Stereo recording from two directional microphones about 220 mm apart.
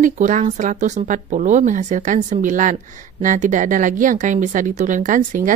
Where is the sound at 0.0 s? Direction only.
35° right (ahead or behind).